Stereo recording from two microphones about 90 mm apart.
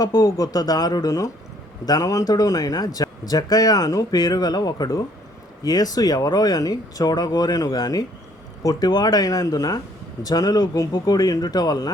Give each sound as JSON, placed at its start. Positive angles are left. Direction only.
{"t": 0.0, "sound": "speech", "side_deg": 45}